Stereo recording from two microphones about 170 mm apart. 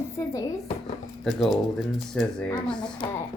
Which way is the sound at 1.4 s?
Centre (ahead or behind).